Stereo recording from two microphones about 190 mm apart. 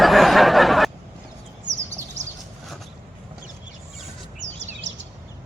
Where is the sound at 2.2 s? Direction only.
40° right (ahead or behind).